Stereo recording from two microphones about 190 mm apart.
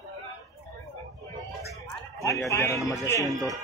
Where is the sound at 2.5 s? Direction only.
15° left (ahead or behind).